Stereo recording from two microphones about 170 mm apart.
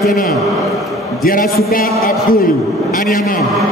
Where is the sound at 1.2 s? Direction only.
55° left (ahead or behind).